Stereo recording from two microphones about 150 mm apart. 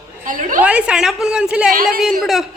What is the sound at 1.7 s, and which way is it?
Speech, 65° right (ahead or behind).